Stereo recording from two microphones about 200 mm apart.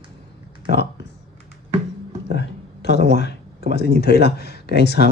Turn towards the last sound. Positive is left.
turn(degrees=55)  # may be behind; listen again after turning